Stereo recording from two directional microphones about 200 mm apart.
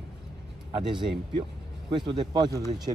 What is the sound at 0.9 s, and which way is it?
Speech, 25° right (ahead or behind).